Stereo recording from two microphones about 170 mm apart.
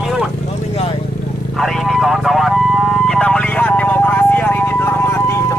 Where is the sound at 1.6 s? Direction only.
Centre (ahead or behind).